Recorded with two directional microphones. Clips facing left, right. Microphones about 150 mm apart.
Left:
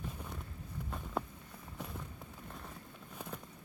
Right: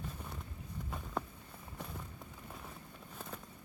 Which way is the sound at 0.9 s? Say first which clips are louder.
Left 1 dB; centre (ahead or behind).